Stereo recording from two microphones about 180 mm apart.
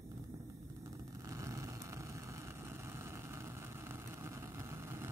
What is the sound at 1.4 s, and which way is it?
Vehicle, 15° right (ahead or behind).